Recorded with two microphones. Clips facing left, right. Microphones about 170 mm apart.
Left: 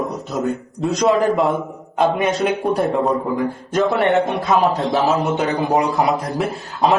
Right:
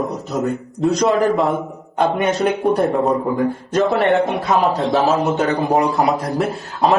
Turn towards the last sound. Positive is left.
turn(degrees=0)  # may be behind; listen again after turning